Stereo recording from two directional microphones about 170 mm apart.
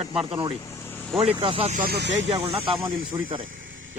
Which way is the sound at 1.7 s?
60° right (ahead or behind).